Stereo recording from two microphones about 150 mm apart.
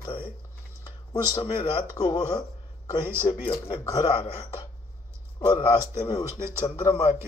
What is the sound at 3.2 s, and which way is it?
Speech, 40° left (ahead or behind).